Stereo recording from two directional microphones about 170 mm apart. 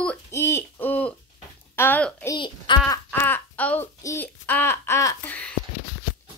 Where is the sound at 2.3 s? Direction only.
30° left (ahead or behind).